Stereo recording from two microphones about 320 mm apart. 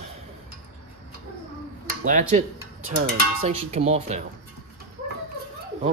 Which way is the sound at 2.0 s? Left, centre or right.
Right.